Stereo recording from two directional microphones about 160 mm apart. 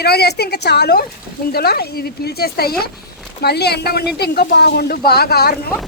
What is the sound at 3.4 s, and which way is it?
Speech, 90° left.